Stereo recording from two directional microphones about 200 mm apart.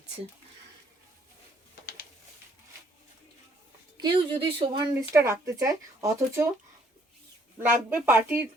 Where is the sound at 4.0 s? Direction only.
25° right (ahead or behind).